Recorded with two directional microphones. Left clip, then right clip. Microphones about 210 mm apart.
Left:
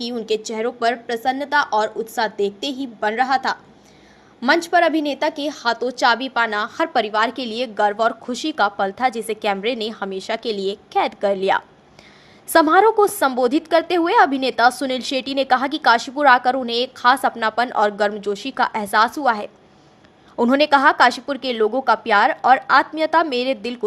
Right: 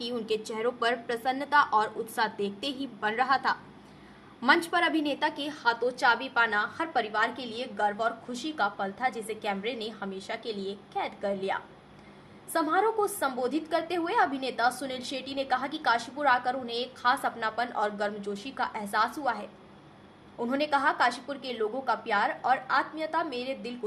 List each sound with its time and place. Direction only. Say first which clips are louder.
0.0 s a woman's voice: left 8 dB; 30° left (ahead or behind)